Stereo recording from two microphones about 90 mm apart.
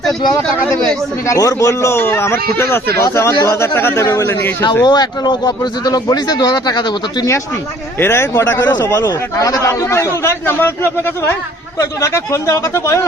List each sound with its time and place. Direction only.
1.3 s speech: 35° left (ahead or behind)
4.6 s speech: 50° left (ahead or behind)
7.9 s speech: 25° left (ahead or behind)
11.8 s speech: 35° left (ahead or behind)